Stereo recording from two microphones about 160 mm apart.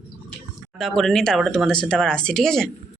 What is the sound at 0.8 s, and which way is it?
Speech, centre (ahead or behind).